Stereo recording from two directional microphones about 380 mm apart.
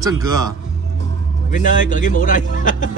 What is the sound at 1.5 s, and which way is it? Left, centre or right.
A man's voice, centre.